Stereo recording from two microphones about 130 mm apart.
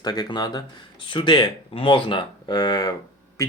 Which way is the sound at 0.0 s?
35° left (ahead or behind).